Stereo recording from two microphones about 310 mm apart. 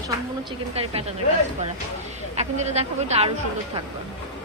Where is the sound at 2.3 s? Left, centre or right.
Right.